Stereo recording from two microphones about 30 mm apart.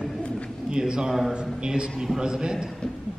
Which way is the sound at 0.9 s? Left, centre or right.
Right.